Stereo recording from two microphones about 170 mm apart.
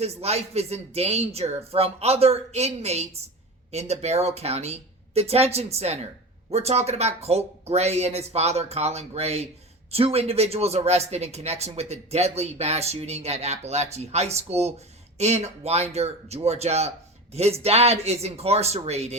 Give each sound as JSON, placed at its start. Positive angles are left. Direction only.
{"t": 0.0, "sound": "speech", "side_deg": -40}